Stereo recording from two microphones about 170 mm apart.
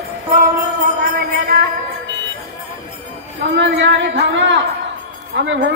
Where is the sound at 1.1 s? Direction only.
65° right (ahead or behind).